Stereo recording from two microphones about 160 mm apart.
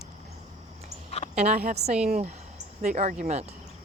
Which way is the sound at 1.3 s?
45° right (ahead or behind).